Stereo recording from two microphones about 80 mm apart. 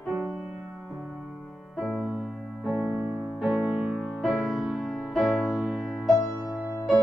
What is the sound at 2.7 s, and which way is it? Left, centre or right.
Music, centre.